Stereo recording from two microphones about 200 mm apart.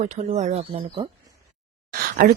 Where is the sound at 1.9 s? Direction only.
45° right (ahead or behind).